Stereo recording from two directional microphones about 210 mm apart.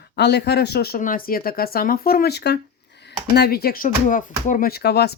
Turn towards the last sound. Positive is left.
turn(degrees=50)  # may be behind; listen again after turning